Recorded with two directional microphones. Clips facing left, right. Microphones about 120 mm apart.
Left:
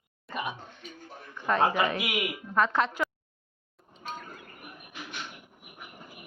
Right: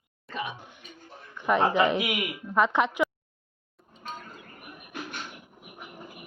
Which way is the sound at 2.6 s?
15° right (ahead or behind).